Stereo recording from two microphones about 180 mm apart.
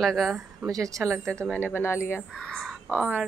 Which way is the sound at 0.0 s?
Centre (ahead or behind).